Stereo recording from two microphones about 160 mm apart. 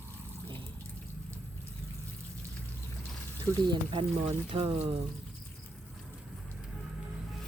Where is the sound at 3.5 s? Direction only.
30° right (ahead or behind).